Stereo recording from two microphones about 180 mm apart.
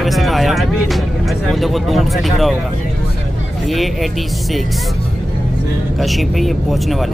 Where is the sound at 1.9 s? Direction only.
Centre (ahead or behind).